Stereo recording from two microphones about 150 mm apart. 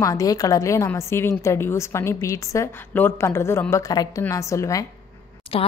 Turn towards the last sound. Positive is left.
turn(degrees=40)  # may be behind; listen again after turning